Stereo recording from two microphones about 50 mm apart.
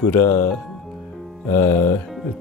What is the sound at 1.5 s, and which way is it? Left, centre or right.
Speech, left.